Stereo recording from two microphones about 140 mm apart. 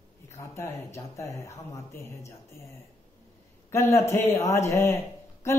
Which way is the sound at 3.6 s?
20° left (ahead or behind).